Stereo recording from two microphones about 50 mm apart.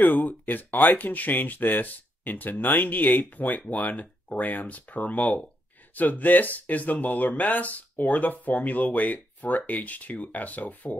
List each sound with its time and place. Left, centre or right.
0.0 s speech: left